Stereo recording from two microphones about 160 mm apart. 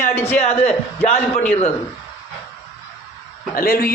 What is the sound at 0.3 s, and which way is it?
A man's voice, 40° left (ahead or behind).